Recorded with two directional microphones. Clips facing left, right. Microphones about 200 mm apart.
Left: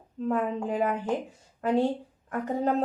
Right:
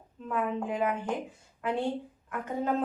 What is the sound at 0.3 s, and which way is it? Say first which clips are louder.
Speech: left 3 dB; 35° left (ahead or behind).